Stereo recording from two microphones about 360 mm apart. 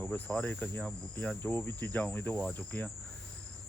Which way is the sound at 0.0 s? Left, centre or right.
Centre.